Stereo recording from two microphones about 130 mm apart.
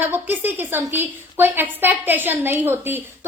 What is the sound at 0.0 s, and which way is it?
A woman's voice, 15° right (ahead or behind).